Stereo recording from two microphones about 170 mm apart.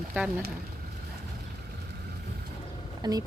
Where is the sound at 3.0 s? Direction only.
25° right (ahead or behind).